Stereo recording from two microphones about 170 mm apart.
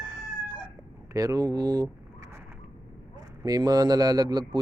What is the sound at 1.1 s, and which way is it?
Speech, 20° right (ahead or behind).